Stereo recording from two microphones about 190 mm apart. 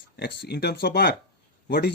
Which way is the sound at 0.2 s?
60° left (ahead or behind).